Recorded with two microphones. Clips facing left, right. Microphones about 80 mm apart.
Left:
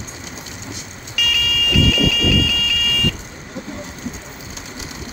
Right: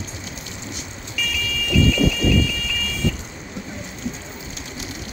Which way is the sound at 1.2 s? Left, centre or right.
Left.